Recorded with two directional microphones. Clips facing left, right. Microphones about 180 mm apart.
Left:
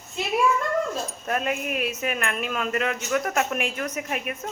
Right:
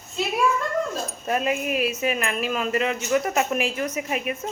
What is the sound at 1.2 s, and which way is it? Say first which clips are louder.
Speech: right 3 dB; 5° right (ahead or behind).